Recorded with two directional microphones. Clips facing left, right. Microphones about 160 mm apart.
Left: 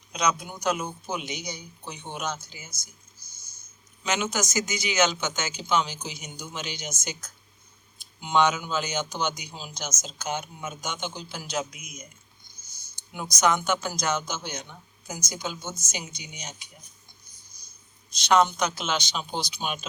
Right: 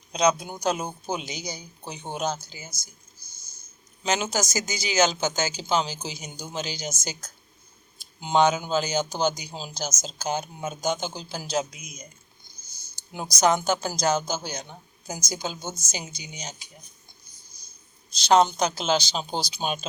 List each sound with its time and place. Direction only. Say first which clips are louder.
0.1 s speech: right 5 dB; 30° right (ahead or behind)
4.0 s speech: right 2 dB; 35° right (ahead or behind)
18.1 s speech: right 2 dB; 35° right (ahead or behind)